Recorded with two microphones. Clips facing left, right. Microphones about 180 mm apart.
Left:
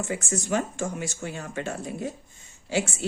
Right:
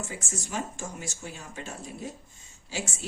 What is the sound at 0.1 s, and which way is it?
A woman's voice, 65° left (ahead or behind).